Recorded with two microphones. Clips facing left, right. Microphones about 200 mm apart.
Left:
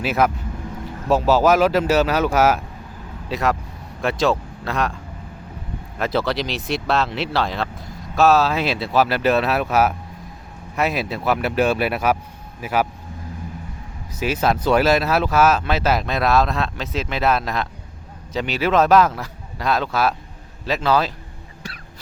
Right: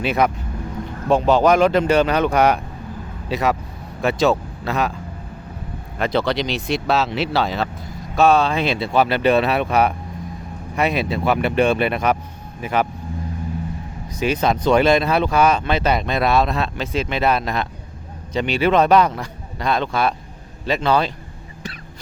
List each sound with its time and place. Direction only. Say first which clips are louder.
0.0 s speech: right 1 dB; 5° left (ahead or behind)
6.0 s speech: right 2 dB; centre (ahead or behind)
14.1 s speech: right 1 dB; 5° left (ahead or behind)